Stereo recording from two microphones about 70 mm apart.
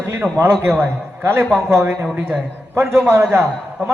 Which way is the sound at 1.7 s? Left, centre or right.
Right.